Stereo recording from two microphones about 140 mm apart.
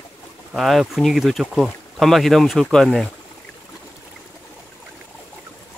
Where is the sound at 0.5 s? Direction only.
Centre (ahead or behind).